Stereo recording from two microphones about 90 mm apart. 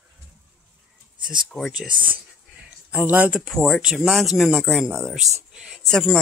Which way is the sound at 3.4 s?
Centre (ahead or behind).